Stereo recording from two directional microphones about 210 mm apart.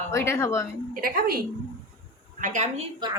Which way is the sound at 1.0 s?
45° right (ahead or behind).